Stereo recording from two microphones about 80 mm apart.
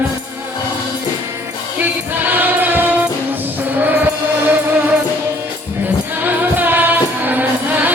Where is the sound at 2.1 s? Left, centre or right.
Right.